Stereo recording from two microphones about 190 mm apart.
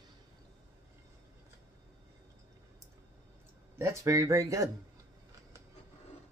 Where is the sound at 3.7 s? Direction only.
15° right (ahead or behind).